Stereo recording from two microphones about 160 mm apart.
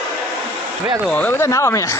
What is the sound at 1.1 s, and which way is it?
Speech, 10° left (ahead or behind).